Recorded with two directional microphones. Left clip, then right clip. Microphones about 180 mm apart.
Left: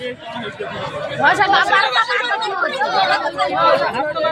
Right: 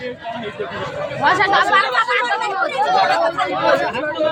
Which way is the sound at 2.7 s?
10° right (ahead or behind).